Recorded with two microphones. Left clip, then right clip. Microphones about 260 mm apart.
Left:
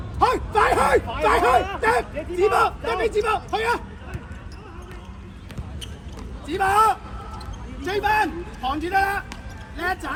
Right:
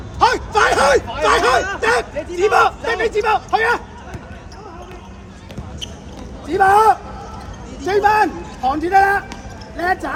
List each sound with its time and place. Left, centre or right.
0.2 s a sound: left
1.3 s a man's voice: left
6.5 s a man's voice: left